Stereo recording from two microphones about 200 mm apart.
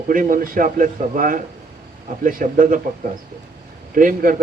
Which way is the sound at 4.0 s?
45° right (ahead or behind).